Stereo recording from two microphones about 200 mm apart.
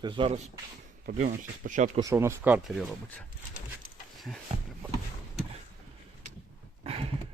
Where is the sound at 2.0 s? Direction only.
15° right (ahead or behind).